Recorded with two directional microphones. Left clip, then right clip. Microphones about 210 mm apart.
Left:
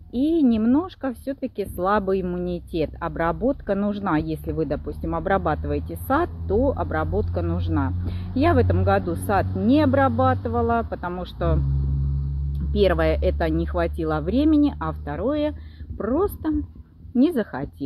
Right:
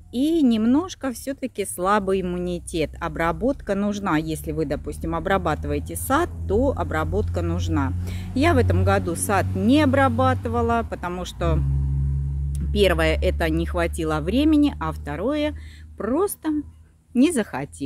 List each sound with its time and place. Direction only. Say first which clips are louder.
0.1 s speech: even; 20° right (ahead or behind)
12.7 s speech: even; 20° right (ahead or behind)